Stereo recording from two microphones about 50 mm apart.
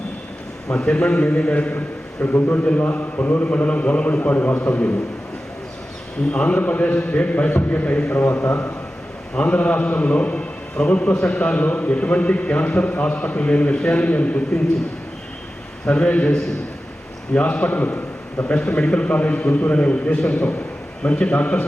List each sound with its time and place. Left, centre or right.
0.7 s a man's voice: centre
2.2 s a man's voice: left
3.5 s a man's voice: left
6.3 s a man's voice: left
8.1 s a man's voice: left
9.3 s a man's voice: left
15.9 s a man's voice: left
17.3 s a man's voice: left